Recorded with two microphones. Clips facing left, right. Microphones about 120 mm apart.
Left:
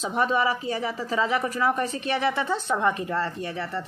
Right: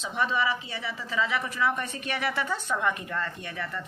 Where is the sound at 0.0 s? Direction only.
45° left (ahead or behind).